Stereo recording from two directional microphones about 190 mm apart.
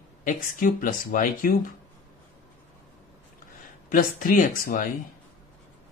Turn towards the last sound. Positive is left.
turn(degrees=45)  # may be behind; listen again after turning